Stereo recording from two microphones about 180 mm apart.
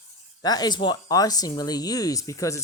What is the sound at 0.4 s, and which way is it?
Speech, 20° left (ahead or behind).